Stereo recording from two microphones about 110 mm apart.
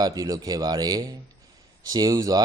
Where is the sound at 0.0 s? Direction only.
35° right (ahead or behind).